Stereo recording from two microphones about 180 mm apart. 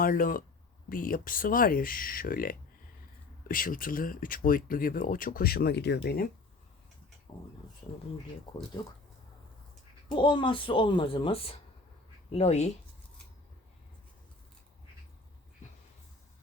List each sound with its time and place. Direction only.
0.0 s speech: 50° left (ahead or behind)
7.3 s a child's voice: 30° left (ahead or behind)
10.2 s a child's voice: 25° left (ahead or behind)